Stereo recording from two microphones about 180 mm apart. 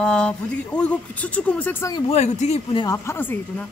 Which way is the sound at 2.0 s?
40° left (ahead or behind).